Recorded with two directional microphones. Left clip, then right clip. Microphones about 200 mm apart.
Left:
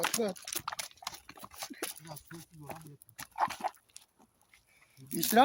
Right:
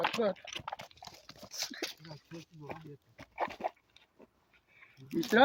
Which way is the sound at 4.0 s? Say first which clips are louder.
Left 4 dB; 25° left (ahead or behind).